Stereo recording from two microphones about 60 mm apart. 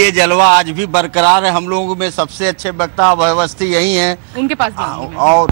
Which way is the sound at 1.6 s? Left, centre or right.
Right.